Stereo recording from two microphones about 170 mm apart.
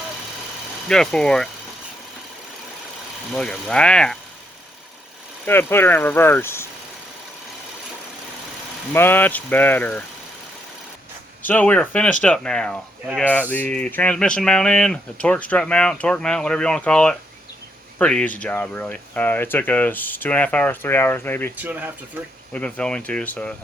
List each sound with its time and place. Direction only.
0.9 s speech: 5° left (ahead or behind)
3.3 s speech: 5° left (ahead or behind)
5.5 s speech: 15° left (ahead or behind)
8.9 s speech: 10° left (ahead or behind)
11.4 s speech: 10° left (ahead or behind)
21.6 s speech: 10° right (ahead or behind)
22.5 s speech: 5° left (ahead or behind)